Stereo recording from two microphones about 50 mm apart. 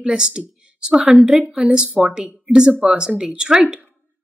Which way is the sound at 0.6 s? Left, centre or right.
Centre.